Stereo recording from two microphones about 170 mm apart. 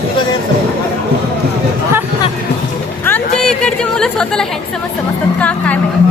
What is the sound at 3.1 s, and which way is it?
Chatter, 5° left (ahead or behind).